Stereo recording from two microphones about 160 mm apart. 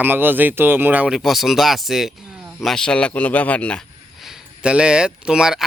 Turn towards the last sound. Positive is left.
turn(degrees=-5)  # may be behind; listen again after turning